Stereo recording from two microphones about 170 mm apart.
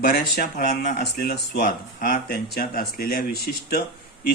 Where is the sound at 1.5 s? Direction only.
55° left (ahead or behind).